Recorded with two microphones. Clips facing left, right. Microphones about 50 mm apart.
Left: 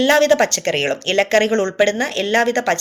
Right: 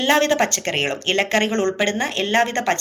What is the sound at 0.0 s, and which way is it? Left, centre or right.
Speech, right.